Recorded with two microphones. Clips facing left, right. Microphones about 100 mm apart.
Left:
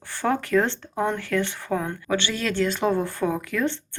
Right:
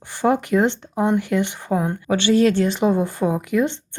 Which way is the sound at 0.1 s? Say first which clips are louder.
Right 4 dB; 15° right (ahead or behind).